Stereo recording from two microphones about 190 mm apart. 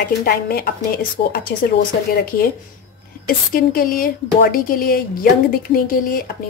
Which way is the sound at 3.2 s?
50° left (ahead or behind).